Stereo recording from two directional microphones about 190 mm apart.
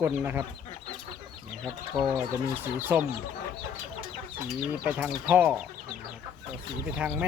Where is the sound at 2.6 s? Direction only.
10° right (ahead or behind).